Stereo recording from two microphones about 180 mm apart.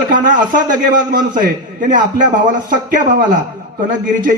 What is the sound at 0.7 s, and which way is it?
A man's voice, 45° right (ahead or behind).